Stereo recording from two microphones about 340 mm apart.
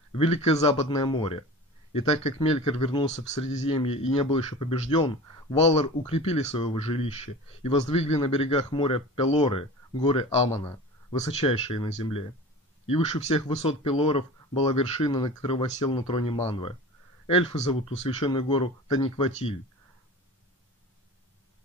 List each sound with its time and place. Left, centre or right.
0.1 s speech: centre